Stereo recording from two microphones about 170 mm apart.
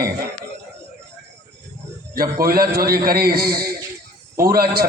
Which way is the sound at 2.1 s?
60° right (ahead or behind).